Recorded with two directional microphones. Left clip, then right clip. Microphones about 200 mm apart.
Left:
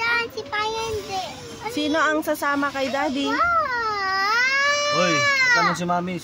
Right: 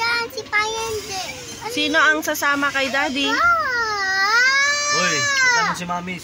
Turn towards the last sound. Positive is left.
turn(degrees=20)  # may be behind; listen again after turning